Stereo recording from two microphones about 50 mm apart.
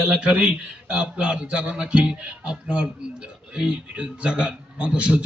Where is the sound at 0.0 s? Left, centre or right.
Centre.